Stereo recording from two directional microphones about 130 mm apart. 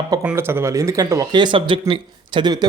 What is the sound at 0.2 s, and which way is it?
Speech, 20° right (ahead or behind).